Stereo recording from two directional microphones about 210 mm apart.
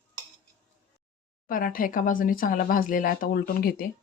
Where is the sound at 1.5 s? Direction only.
40° left (ahead or behind).